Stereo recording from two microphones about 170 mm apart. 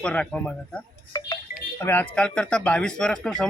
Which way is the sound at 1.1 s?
25° left (ahead or behind).